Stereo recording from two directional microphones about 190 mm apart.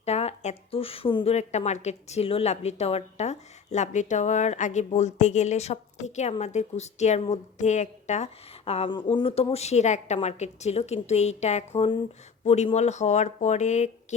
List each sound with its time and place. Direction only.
0.0 s speech: 35° left (ahead or behind)